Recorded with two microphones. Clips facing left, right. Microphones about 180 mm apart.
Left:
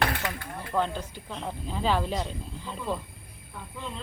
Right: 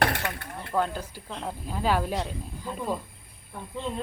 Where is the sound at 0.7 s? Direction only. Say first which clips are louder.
Right 1 dB; 10° right (ahead or behind).